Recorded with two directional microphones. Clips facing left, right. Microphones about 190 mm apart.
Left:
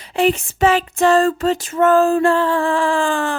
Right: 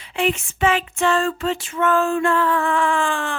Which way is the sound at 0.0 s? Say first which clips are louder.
Left 5 dB; 40° left (ahead or behind).